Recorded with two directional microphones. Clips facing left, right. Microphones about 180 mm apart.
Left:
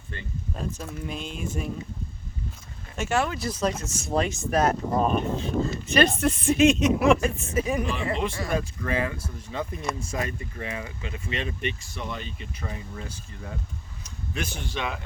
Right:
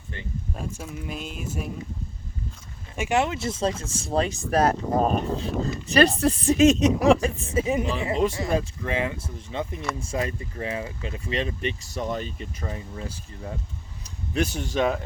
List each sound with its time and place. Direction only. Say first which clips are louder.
0.1 s speech: right 1 dB; 15° right (ahead or behind)
1.0 s music: left 2 dB; 5° right (ahead or behind)
2.9 s speech: right 2 dB; 15° right (ahead or behind); by 14.9 s 40° right (ahead or behind)